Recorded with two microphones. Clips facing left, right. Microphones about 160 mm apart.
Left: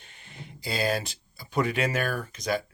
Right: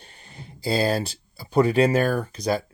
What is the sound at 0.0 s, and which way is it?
Speech, 35° right (ahead or behind).